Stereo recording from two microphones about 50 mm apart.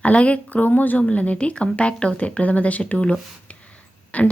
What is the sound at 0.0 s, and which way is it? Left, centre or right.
Speech, left.